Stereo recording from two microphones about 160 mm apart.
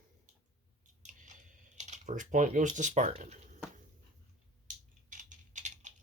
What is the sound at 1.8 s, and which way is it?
Speech, 50° right (ahead or behind).